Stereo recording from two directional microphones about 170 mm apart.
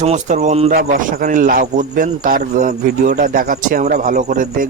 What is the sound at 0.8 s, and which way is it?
A man's voice, 55° right (ahead or behind).